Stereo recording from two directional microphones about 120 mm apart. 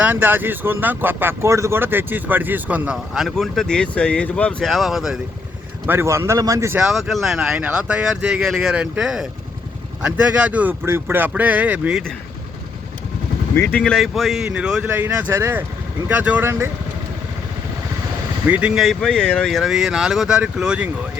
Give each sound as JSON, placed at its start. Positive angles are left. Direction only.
{"t": 0.0, "sound": "speech", "side_deg": -15}
{"t": 5.8, "sound": "speech", "side_deg": -20}
{"t": 6.7, "sound": "speech", "side_deg": 0}
{"t": 13.6, "sound": "speech", "side_deg": 10}
{"t": 18.4, "sound": "speech", "side_deg": -10}